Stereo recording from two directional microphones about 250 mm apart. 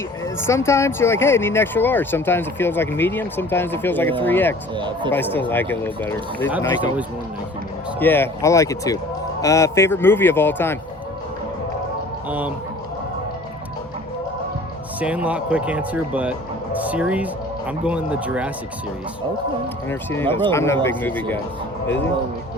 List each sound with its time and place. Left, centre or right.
0.3 s speech: centre
4.7 s speech: centre
5.1 s speech: centre
7.9 s speech: centre
12.3 s speech: centre
15.0 s speech: centre
19.9 s speech: centre